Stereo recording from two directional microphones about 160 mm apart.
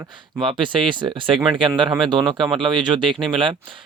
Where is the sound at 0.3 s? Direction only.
30° right (ahead or behind).